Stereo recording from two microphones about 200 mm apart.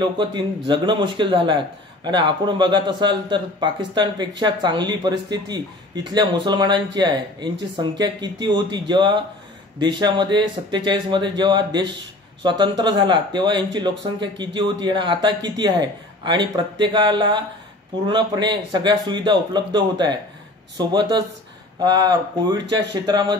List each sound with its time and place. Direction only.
0.0 s speech: 20° right (ahead or behind)